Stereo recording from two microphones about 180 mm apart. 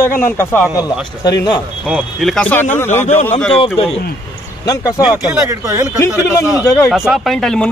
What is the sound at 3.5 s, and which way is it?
Speech, 30° left (ahead or behind).